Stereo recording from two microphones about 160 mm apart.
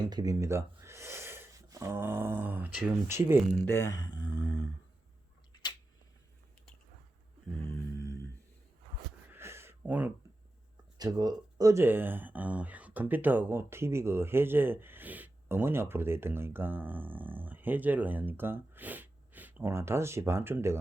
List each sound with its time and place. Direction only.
0.0 s speech: 25° right (ahead or behind)
3.7 s speech: 20° left (ahead or behind)
7.9 s humming: 90° left
9.3 s a sound: 15° right (ahead or behind)
10.9 s speech: 25° right (ahead or behind)